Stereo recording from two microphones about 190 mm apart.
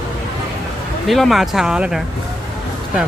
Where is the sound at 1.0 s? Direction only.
Centre (ahead or behind).